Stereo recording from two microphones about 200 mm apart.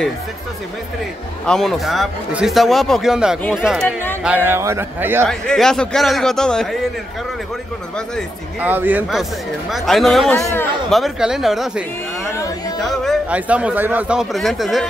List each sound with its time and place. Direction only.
1.4 s a man's voice: centre (ahead or behind)
4.5 s a man's voice: 15° right (ahead or behind)
5.2 s a man's voice: 5° left (ahead or behind)
8.5 s a man's voice: 10° right (ahead or behind)
12.4 s music: 20° left (ahead or behind)
12.8 s a man's voice: centre (ahead or behind)